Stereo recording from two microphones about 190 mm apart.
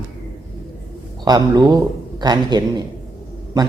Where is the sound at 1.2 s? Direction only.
20° right (ahead or behind).